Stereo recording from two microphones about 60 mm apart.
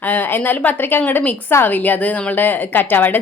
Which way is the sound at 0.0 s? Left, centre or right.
Left.